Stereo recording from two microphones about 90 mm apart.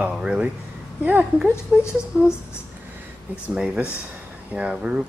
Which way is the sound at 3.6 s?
10° right (ahead or behind).